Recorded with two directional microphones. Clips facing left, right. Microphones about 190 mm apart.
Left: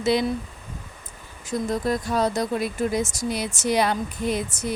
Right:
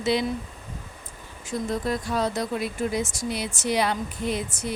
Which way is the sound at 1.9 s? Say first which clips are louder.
Left 4 dB; 40° left (ahead or behind).